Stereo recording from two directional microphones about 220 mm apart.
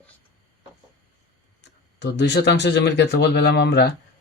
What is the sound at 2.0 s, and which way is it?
A man's voice, 50° left (ahead or behind).